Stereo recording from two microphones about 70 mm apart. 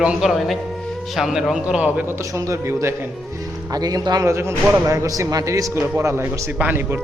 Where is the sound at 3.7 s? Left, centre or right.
Right.